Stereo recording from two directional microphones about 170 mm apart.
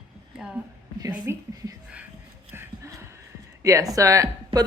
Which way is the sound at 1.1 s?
10° right (ahead or behind).